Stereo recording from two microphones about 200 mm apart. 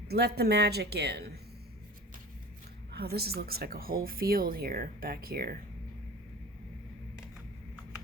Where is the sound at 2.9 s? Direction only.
50° right (ahead or behind).